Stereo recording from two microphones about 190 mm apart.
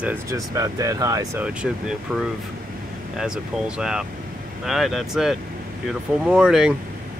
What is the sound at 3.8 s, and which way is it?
Speech, 5° right (ahead or behind).